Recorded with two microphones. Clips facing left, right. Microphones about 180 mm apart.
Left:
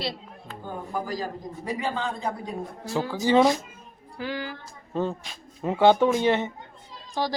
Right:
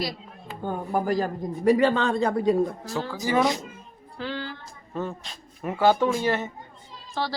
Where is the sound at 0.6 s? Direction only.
60° right (ahead or behind); by 2.6 s 80° right.